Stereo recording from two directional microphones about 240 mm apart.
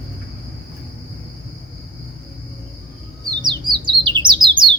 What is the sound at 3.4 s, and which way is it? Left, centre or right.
Bird, centre.